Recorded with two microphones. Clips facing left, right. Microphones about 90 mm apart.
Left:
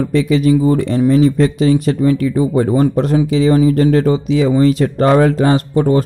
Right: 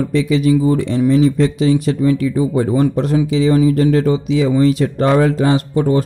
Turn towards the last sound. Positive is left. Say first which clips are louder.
# left 2 dB
turn(degrees=40)  # may be behind; listen again after turning